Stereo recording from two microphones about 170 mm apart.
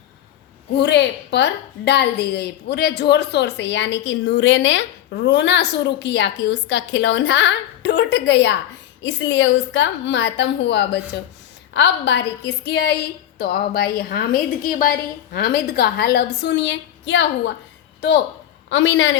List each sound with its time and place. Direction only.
0.8 s a woman's voice: 85° left
18.7 s a woman's voice: 90° left